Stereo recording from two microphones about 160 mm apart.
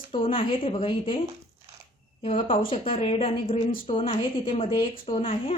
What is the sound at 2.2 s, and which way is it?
A woman's voice, 35° left (ahead or behind).